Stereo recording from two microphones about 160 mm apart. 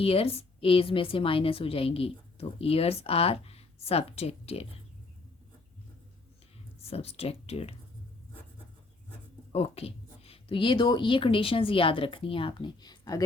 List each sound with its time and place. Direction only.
0.0 s a woman's voice: 35° left (ahead or behind)
6.8 s a woman's voice: 40° left (ahead or behind)
9.5 s a woman's voice: 40° left (ahead or behind); by 13.2 s 25° left (ahead or behind)